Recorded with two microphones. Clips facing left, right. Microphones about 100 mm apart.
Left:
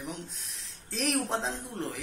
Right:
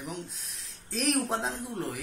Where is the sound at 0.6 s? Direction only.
Centre (ahead or behind).